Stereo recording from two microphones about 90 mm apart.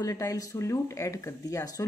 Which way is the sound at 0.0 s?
40° left (ahead or behind).